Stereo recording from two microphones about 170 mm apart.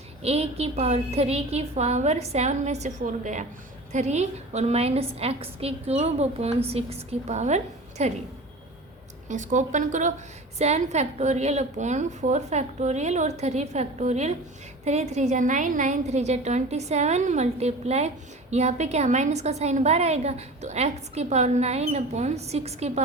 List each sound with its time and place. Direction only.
0.2 s a woman's voice: 35° right (ahead or behind)
9.3 s a woman's voice: 45° right (ahead or behind)